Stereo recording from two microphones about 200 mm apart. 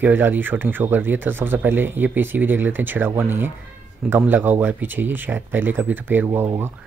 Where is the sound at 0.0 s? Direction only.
10° right (ahead or behind).